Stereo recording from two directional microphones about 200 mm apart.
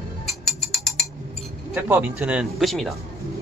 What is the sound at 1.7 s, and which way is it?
A man's voice, 5° right (ahead or behind).